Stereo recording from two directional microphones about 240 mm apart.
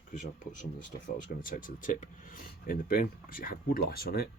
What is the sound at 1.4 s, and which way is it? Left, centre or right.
Speech, left.